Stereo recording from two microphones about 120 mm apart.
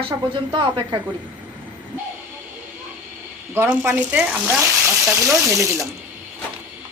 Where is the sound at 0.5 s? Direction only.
40° right (ahead or behind).